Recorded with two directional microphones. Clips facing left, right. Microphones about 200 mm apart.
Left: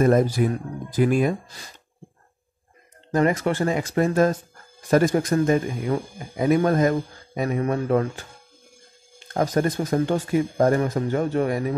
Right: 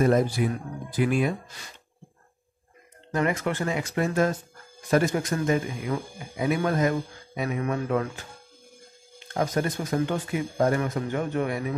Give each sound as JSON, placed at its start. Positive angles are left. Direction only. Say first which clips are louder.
{"t": 0.0, "sound": "speech", "louder": "left 3 dB", "side_deg": 45}
{"t": 3.1, "sound": "speech", "louder": "left 5 dB", "side_deg": 35}
{"t": 5.3, "sound": "speech", "louder": "left 5 dB", "side_deg": 35}
{"t": 9.3, "sound": "speech", "louder": "left 4 dB", "side_deg": 45}